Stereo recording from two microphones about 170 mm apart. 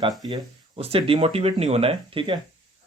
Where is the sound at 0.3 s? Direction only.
30° right (ahead or behind).